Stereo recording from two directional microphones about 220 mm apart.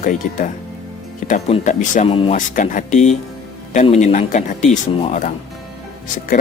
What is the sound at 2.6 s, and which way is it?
Speech, 35° left (ahead or behind).